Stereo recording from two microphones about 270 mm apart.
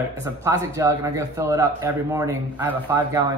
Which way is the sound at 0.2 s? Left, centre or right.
Centre.